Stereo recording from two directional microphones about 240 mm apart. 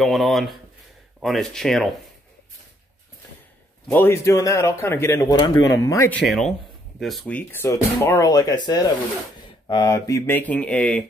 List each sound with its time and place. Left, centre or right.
0.0 s speech: centre
3.9 s speech: centre